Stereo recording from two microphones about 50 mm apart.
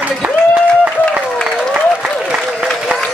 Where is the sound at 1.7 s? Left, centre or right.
Centre.